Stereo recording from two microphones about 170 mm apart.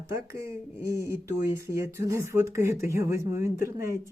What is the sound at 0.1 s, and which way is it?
Speech, 15° right (ahead or behind).